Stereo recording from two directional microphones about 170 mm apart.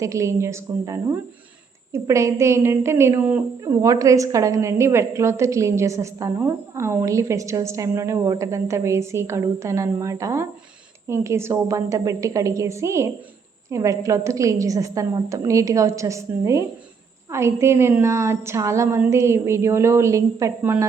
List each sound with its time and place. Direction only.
0.0 s a woman's voice: 20° right (ahead or behind)